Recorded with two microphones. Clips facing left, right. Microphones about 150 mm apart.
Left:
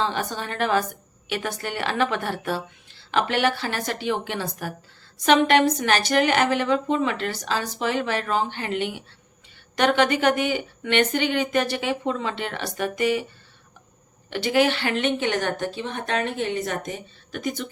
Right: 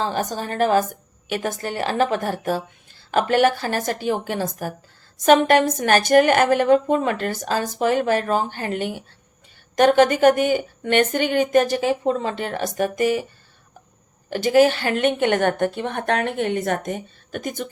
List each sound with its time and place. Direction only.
0.0 s a woman's voice: 40° right (ahead or behind)
14.3 s a woman's voice: 45° right (ahead or behind)